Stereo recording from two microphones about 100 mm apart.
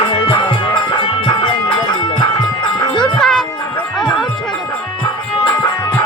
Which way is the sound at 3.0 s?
5° left (ahead or behind).